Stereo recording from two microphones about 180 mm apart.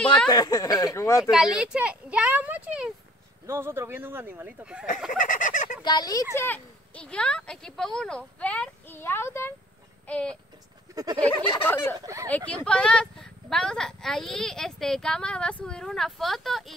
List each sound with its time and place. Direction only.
0.0 s a sound: 5° left (ahead or behind)
0.3 s speech: 20° left (ahead or behind)
1.3 s speech: 5° right (ahead or behind)
5.1 s fowl: 45° left (ahead or behind)
5.8 s speech: 25° left (ahead or behind)
6.3 s speech: 10° left (ahead or behind)
10.0 s a sound: 5° left (ahead or behind)
10.9 s goat: 20° right (ahead or behind)
11.2 s speech: 10° left (ahead or behind)